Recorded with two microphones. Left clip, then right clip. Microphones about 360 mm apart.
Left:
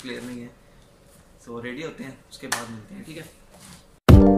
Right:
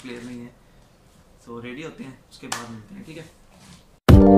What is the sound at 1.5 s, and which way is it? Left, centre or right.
Speech, centre.